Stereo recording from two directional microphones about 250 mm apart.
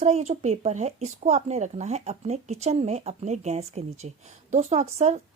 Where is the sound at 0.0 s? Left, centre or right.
Right.